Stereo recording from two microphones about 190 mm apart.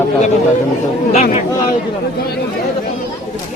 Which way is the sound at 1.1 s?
35° left (ahead or behind).